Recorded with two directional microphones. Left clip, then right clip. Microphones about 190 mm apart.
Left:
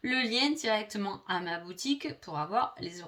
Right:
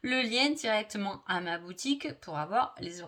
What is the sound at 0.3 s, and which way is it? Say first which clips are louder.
Speech: even; 40° right (ahead or behind).